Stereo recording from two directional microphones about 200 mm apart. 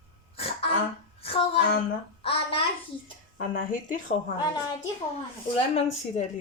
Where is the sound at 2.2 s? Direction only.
25° left (ahead or behind).